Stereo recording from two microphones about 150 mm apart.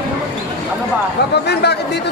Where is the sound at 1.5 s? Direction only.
90° left.